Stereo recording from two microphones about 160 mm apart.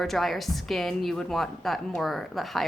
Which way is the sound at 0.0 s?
Centre (ahead or behind).